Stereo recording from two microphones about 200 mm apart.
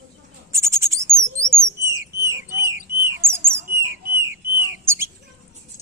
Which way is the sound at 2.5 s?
55° right (ahead or behind).